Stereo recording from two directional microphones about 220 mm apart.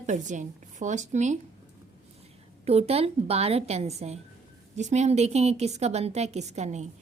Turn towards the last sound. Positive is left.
turn(degrees=-30)  # may be behind; listen again after turning